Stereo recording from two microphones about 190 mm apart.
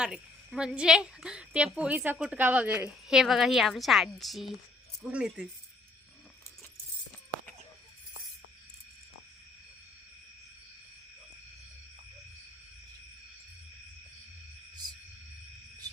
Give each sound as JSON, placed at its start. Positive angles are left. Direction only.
{"t": 0.0, "sound": "a woman's voice", "side_deg": -5}